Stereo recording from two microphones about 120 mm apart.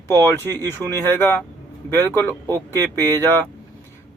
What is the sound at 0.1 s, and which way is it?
Speech, 20° left (ahead or behind).